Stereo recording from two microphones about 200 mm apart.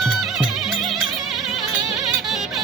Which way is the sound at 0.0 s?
Centre (ahead or behind).